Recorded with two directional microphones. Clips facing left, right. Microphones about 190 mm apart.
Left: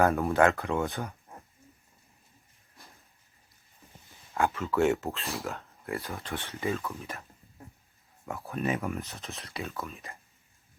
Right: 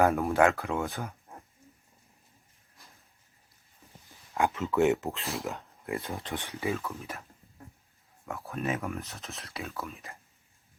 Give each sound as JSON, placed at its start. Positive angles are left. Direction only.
{"t": 0.1, "sound": "speech", "side_deg": 0}
{"t": 4.4, "sound": "speech", "side_deg": -15}
{"t": 6.9, "sound": "speech", "side_deg": 0}
{"t": 8.3, "sound": "speech", "side_deg": 0}